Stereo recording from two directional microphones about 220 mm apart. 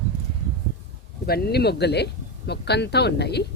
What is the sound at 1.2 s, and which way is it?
Speech, 45° left (ahead or behind).